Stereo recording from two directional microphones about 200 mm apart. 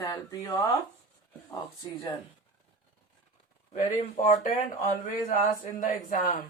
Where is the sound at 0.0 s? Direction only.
20° left (ahead or behind).